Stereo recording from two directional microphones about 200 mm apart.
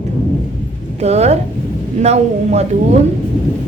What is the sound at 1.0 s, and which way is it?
A woman's voice, 30° right (ahead or behind).